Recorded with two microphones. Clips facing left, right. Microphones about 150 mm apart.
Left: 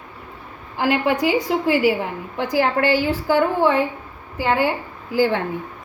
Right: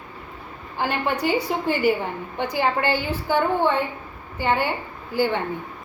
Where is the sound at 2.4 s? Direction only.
90° left.